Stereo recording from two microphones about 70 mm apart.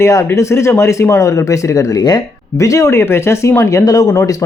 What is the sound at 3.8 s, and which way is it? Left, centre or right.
Speech, left.